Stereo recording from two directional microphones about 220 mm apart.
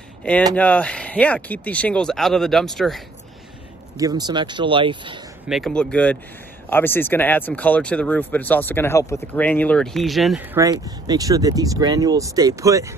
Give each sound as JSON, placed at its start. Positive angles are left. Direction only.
{"t": 0.6, "sound": "speech", "side_deg": 5}
{"t": 4.0, "sound": "speech", "side_deg": -20}
{"t": 5.5, "sound": "speech", "side_deg": 0}
{"t": 10.6, "sound": "speech", "side_deg": -15}